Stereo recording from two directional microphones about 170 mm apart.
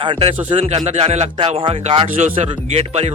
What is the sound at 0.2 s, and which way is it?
Speech, 35° right (ahead or behind).